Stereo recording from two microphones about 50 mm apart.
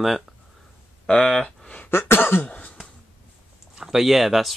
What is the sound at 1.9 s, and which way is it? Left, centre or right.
Cough, left.